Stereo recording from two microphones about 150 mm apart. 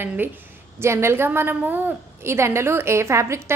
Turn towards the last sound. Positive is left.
turn(degrees=-20)  # may be behind; listen again after turning